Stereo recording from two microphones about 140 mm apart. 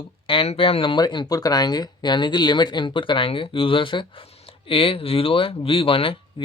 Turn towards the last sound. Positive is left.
turn(degrees=40)  # may be behind; listen again after turning